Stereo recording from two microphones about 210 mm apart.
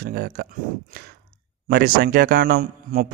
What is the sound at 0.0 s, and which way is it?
Speech, 50° right (ahead or behind).